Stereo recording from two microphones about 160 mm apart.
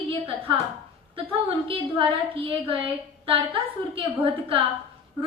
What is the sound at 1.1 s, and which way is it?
A woman's voice, 35° right (ahead or behind).